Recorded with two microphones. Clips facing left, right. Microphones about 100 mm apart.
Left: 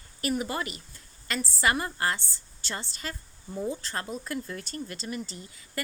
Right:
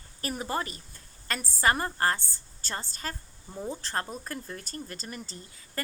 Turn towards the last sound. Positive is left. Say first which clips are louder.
# left 1 dB
turn(degrees=-40)  # may be behind; listen again after turning